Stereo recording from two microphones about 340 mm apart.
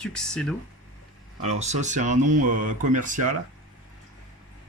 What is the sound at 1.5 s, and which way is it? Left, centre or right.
Speech, centre.